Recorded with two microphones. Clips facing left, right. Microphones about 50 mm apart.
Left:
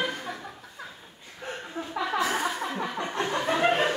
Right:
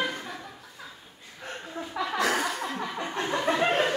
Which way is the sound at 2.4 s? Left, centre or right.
Centre.